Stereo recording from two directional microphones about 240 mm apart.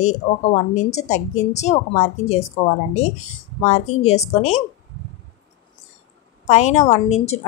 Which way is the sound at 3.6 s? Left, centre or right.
Left.